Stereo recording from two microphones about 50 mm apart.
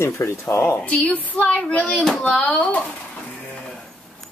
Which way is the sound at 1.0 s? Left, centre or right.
Left.